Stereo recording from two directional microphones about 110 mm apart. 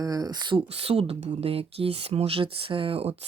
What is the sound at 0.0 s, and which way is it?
Speech, 35° right (ahead or behind).